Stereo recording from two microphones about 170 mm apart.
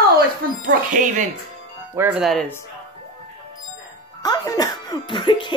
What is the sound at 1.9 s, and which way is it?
Speech, 10° right (ahead or behind).